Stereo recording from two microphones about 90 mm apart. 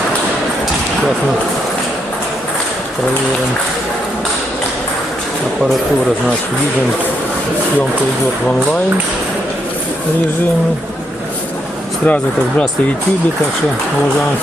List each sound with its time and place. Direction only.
12.0 s speech: 15° left (ahead or behind)